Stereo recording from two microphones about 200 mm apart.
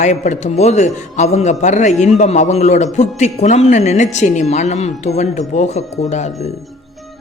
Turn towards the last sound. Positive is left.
turn(degrees=35)  # may be behind; listen again after turning